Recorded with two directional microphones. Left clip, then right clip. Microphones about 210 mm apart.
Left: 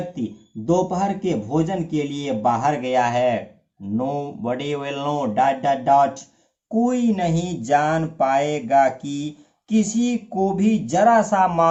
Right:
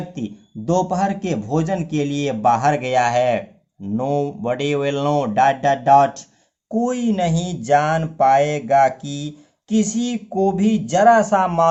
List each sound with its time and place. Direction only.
0.1 s a man's voice: 45° right (ahead or behind); by 11.7 s 30° right (ahead or behind)